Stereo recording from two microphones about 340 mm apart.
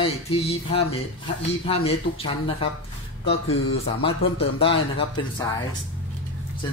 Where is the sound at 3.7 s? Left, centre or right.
Centre.